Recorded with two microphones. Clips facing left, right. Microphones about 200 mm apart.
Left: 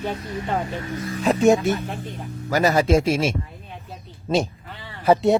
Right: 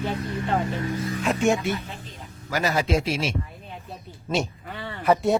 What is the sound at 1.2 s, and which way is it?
Speech, 35° left (ahead or behind).